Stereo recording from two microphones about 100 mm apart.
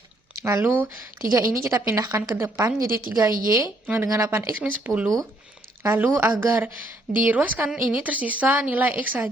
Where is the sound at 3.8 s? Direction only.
20° right (ahead or behind).